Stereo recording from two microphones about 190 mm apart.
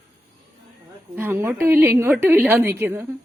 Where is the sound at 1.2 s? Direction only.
10° right (ahead or behind).